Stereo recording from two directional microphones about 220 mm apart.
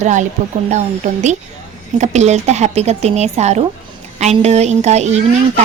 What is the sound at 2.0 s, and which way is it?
A woman's voice, 30° right (ahead or behind).